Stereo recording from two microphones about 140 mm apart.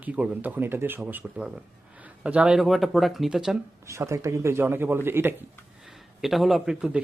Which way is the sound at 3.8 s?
20° right (ahead or behind).